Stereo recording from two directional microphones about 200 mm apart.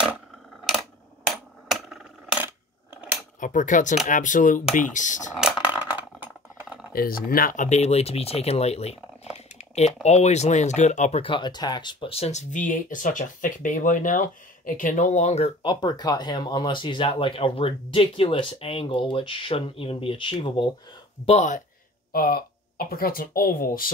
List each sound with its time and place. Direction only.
0.7 s a sound: centre (ahead or behind)
3.3 s speech: 40° left (ahead or behind)
5.3 s a sound: 5° right (ahead or behind)
6.9 s speech: 45° left (ahead or behind); by 20.6 s 25° left (ahead or behind)
21.3 s speech: 35° left (ahead or behind)
22.1 s speech: 50° left (ahead or behind)